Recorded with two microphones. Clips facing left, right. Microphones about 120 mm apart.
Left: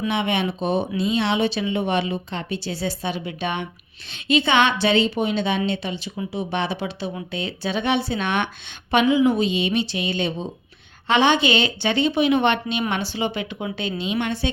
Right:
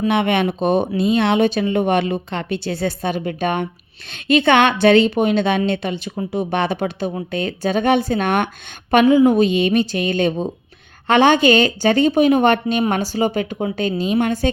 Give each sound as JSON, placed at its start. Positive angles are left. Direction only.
{"t": 0.1, "sound": "a woman's voice", "side_deg": -55}